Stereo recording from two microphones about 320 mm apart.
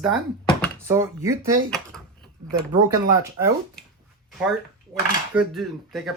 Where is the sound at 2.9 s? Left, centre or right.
Centre.